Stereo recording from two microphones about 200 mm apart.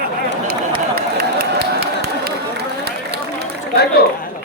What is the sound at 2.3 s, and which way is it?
Run, 55° right (ahead or behind).